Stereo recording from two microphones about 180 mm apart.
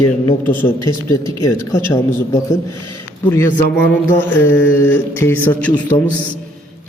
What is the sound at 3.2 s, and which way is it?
Speech, 15° left (ahead or behind).